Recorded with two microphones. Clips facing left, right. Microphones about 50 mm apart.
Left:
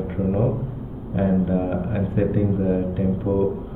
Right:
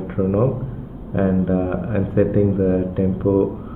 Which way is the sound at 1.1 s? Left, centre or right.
Right.